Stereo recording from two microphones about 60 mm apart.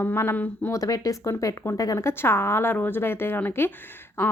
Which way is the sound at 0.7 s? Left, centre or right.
Left.